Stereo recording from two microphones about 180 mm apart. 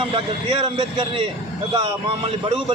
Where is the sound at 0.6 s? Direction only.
30° right (ahead or behind).